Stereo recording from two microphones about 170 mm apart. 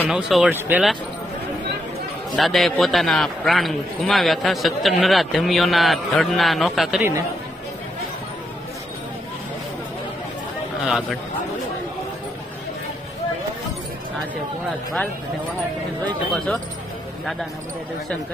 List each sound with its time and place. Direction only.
0.1 s a man's voice: 5° right (ahead or behind)
2.3 s a man's voice: centre (ahead or behind)
7.0 s speech: 15° right (ahead or behind)
10.8 s a man's voice: centre (ahead or behind)